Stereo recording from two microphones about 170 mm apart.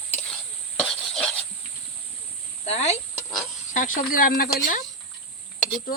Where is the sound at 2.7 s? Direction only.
40° left (ahead or behind).